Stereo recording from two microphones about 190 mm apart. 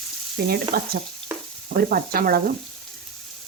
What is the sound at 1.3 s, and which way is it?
Frying, 10° right (ahead or behind).